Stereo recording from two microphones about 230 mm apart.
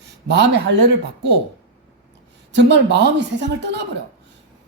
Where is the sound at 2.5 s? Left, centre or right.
Right.